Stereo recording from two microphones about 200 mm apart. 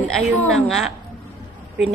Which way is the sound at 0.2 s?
Centre (ahead or behind).